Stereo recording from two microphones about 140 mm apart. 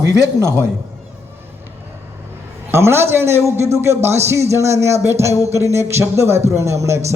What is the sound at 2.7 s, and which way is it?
A man's voice, 20° right (ahead or behind).